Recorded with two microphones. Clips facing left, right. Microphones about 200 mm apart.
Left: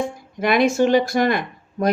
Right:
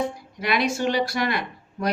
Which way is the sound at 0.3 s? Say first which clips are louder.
Left 8 dB; 50° left (ahead or behind).